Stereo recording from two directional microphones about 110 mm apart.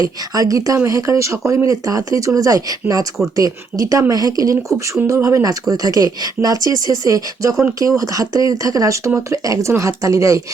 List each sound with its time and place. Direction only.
0.0 s speech: 30° right (ahead or behind)